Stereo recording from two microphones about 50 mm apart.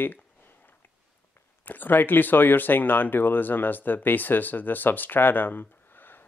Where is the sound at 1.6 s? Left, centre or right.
Left.